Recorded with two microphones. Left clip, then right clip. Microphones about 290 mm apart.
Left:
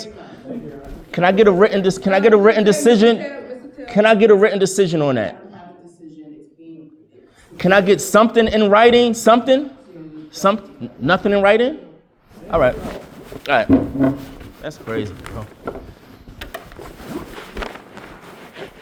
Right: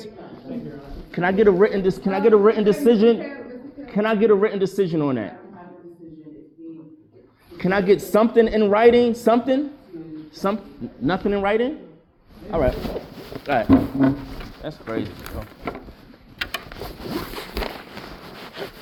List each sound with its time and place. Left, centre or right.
1.1 s a man's voice: left
7.5 s a man's voice: left
11.0 s speech: left